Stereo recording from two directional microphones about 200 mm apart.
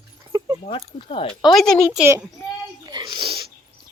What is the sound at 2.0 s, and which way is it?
Speech, 10° right (ahead or behind).